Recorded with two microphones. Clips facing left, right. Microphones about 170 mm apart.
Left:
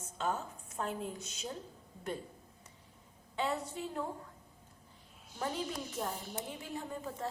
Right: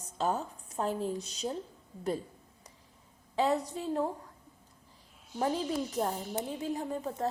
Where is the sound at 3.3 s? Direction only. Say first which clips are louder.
Right 7 dB; 35° right (ahead or behind).